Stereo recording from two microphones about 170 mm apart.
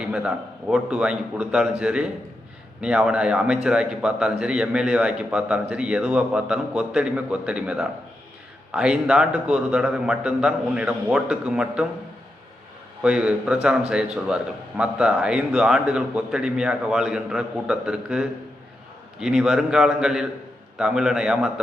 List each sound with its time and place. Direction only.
0.0 s a man's voice: 5° right (ahead or behind)
13.0 s a man's voice: 5° right (ahead or behind)
14.8 s a man's voice: 5° right (ahead or behind)